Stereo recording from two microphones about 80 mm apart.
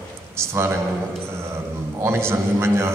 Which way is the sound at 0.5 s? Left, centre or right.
Right.